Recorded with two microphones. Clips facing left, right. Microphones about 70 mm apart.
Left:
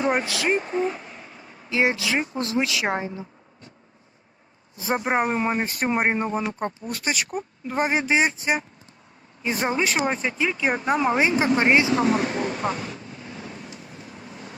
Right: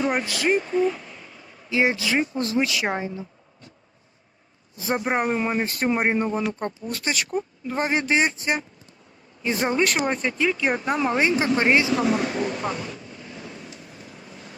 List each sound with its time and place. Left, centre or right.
0.0 s speech: centre
0.5 s a sound: left
1.7 s speech: centre
4.9 s speech: centre